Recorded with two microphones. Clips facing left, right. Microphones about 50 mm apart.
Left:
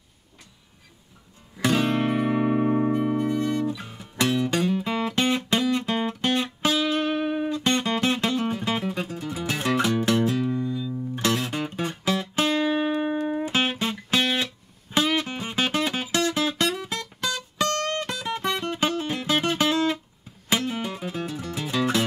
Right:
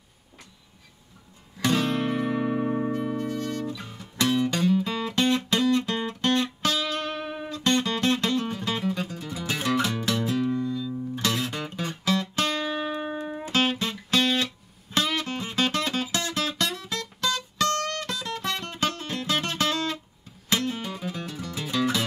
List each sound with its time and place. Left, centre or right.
1.6 s music: centre
9.8 s music: centre
10.2 s music: centre
16.1 s music: left; by 22.0 s centre